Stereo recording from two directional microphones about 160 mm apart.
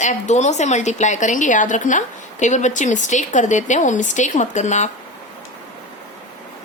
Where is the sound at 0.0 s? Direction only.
45° left (ahead or behind).